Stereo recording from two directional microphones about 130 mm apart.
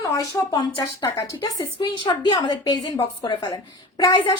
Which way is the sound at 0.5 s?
35° left (ahead or behind).